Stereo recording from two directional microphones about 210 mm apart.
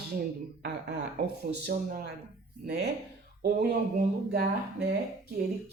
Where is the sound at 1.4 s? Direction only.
45° right (ahead or behind).